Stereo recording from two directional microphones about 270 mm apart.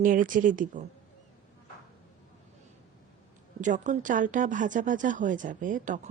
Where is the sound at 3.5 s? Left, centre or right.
Right.